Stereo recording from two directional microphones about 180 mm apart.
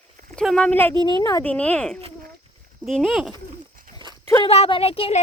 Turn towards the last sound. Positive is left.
turn(degrees=35)  # may be behind; listen again after turning